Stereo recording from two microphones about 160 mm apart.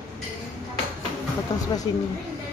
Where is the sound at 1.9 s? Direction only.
30° left (ahead or behind).